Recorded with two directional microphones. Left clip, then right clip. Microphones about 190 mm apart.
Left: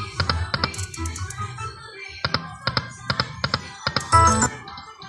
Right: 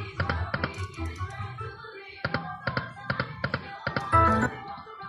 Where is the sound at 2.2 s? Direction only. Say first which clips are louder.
Left 5 dB; 15° right (ahead or behind).